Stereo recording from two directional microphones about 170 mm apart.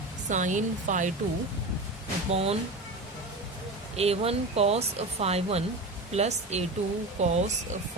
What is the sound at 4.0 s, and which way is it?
Speech, 35° right (ahead or behind).